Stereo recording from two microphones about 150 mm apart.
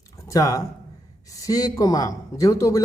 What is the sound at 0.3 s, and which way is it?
A man's voice, 25° left (ahead or behind).